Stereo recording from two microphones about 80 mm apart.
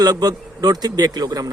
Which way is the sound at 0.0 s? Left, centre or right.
Right.